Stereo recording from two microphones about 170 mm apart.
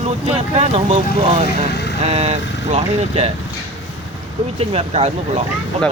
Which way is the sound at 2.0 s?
40° right (ahead or behind).